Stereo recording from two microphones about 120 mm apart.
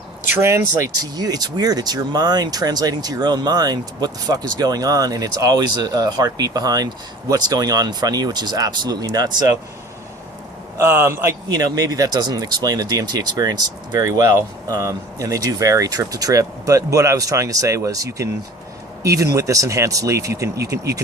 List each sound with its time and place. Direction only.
0.3 s speech: 25° right (ahead or behind)
10.8 s speech: 20° right (ahead or behind)